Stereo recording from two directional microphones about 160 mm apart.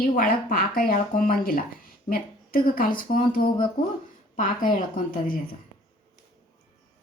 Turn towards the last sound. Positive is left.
turn(degrees=60)  # may be behind; listen again after turning